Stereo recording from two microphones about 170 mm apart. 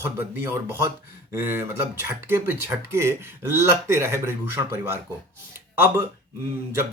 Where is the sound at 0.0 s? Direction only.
15° right (ahead or behind).